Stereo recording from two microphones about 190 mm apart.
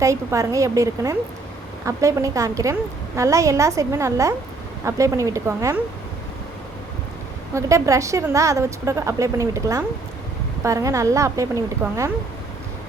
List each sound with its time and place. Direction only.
0.0 s a woman's voice: 15° right (ahead or behind)
7.5 s a woman's voice: 15° right (ahead or behind)